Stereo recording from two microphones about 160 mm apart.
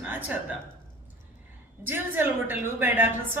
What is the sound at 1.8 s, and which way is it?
A woman's voice, 10° right (ahead or behind).